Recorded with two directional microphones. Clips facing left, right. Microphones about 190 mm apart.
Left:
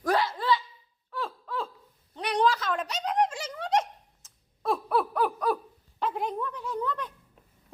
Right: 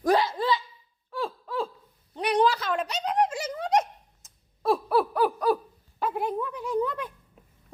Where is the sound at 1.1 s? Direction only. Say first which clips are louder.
Right 3 dB; 10° right (ahead or behind).